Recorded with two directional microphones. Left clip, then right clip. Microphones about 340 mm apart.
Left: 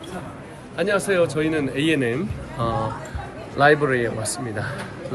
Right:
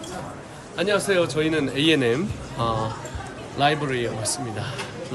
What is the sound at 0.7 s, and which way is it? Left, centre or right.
Speech, centre.